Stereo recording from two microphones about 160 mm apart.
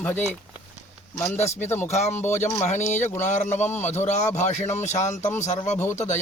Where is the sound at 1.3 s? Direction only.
45° left (ahead or behind).